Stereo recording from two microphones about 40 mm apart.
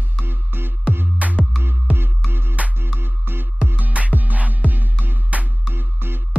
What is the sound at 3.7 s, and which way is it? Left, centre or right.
Music, right.